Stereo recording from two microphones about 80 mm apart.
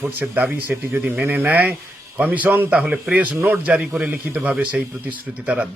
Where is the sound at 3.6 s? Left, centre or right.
Centre.